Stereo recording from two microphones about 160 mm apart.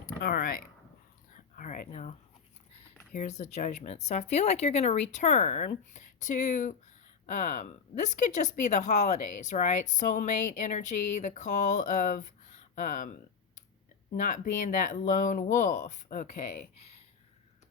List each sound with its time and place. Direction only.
0.1 s a sound: 65° left (ahead or behind); by 2.1 s 50° left (ahead or behind)
3.1 s speech: 50° left (ahead or behind)
14.1 s speech: 55° left (ahead or behind)